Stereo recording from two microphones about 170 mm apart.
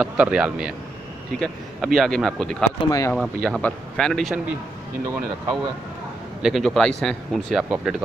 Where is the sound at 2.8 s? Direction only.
20° left (ahead or behind).